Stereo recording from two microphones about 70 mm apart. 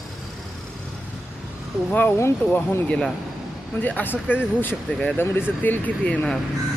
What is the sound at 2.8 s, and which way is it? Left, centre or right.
Speech, centre.